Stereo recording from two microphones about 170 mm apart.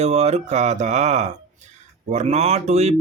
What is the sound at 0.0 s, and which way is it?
Speech, 40° right (ahead or behind).